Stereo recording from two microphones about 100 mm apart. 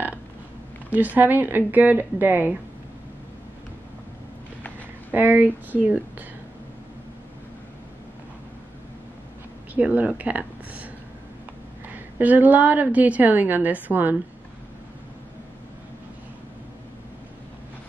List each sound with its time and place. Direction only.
0.8 s a woman's voice: 15° right (ahead or behind)
5.1 s a woman's voice: 15° right (ahead or behind)
9.8 s a woman's voice: 15° right (ahead or behind)
11.9 s a woman's voice: 15° right (ahead or behind)